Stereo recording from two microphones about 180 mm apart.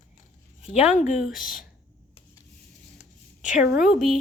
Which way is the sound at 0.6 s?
35° left (ahead or behind).